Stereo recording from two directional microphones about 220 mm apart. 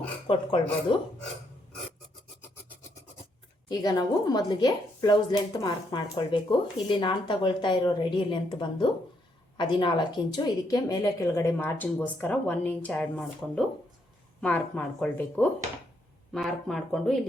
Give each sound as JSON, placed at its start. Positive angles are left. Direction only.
{"t": 0.3, "sound": "speech", "side_deg": 25}
{"t": 3.7, "sound": "speech", "side_deg": 20}